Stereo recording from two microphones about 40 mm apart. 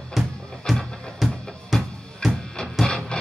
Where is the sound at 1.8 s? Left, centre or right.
Centre.